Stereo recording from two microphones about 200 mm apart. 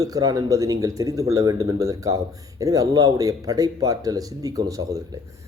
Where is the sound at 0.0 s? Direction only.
20° right (ahead or behind).